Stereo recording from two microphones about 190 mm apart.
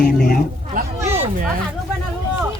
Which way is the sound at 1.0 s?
30° right (ahead or behind).